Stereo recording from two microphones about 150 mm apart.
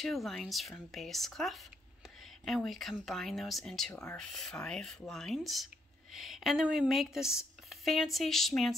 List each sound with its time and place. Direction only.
0.0 s speech: centre (ahead or behind)